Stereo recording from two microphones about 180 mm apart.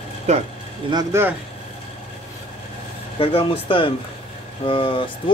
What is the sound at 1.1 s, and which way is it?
Speech, 15° right (ahead or behind).